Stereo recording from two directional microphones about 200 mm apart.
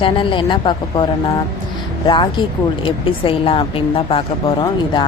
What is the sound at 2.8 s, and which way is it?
A woman's voice, 25° left (ahead or behind).